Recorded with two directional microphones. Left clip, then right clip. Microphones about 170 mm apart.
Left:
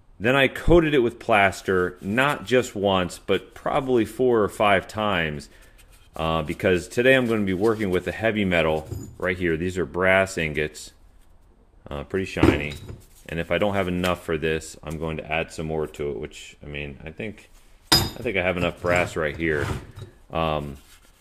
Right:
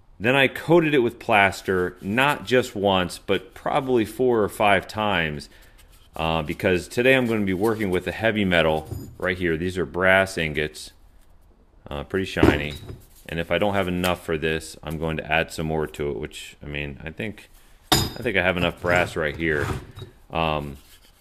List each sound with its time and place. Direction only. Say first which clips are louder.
0.2 s speech: even; 5° right (ahead or behind)
11.8 s speech: right 1 dB; 10° right (ahead or behind)
14.8 s speech: right 2 dB; 20° right (ahead or behind)